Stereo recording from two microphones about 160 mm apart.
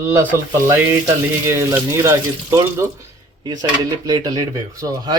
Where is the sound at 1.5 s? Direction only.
15° right (ahead or behind).